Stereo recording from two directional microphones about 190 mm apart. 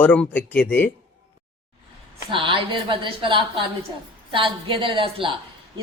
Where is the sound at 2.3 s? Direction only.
25° right (ahead or behind).